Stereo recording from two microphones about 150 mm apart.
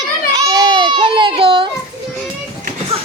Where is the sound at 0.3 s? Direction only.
25° right (ahead or behind).